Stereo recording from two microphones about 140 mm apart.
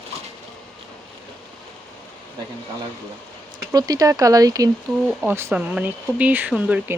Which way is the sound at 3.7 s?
25° right (ahead or behind).